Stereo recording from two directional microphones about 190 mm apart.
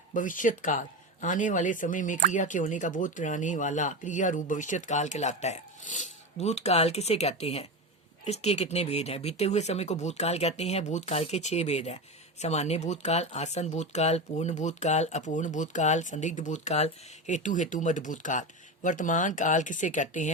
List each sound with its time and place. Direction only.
0.1 s speech: 45° left (ahead or behind)